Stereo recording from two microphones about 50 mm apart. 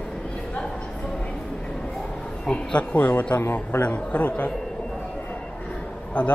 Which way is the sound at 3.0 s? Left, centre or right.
Left.